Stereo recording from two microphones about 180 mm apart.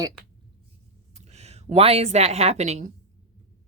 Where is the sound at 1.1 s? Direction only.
35° right (ahead or behind).